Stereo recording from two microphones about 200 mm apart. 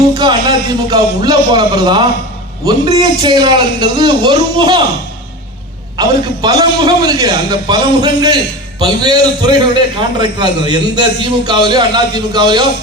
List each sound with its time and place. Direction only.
0.1 s a man's voice: 20° right (ahead or behind)
6.0 s a man's voice: 20° right (ahead or behind)